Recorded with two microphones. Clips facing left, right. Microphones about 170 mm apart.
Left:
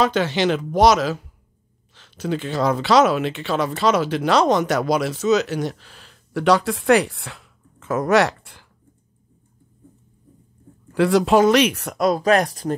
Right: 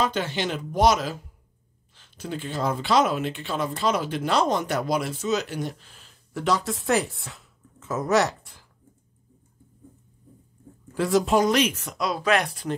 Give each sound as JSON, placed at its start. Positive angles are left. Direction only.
{"t": 0.0, "sound": "speech", "side_deg": 80}
{"t": 11.0, "sound": "speech", "side_deg": 75}
{"t": 12.1, "sound": "speech", "side_deg": 40}